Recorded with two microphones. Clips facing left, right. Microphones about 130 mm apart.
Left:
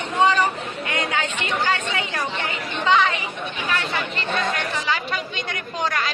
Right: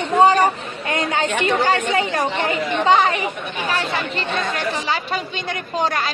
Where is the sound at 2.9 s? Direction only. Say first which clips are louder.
Right 3 dB; 40° right (ahead or behind).